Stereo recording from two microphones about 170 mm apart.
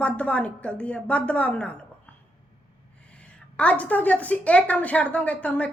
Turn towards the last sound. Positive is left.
turn(degrees=10)  # may be behind; listen again after turning